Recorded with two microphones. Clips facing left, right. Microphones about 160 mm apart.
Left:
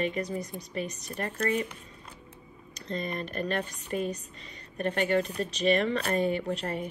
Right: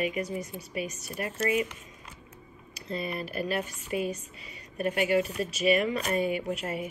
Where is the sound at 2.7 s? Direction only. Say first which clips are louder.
Even; 5° right (ahead or behind).